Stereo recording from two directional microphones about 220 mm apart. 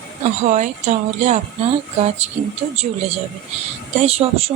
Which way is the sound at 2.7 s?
30° right (ahead or behind).